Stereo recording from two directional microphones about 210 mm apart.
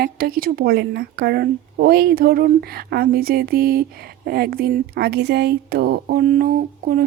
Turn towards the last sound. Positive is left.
turn(degrees=-40)  # may be behind; listen again after turning